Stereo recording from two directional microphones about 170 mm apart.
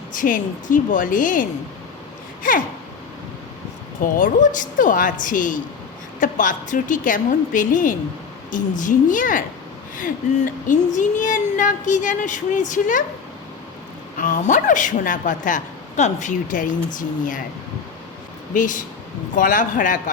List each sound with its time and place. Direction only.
0.1 s a woman's voice: 50° left (ahead or behind)
2.4 s a sound: 50° left (ahead or behind)
4.0 s a woman's voice: 50° left (ahead or behind)
14.2 s a woman's voice: 45° left (ahead or behind)
18.5 s a woman's voice: 50° left (ahead or behind)